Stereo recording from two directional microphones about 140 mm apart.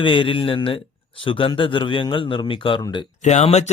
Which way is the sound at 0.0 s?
40° left (ahead or behind).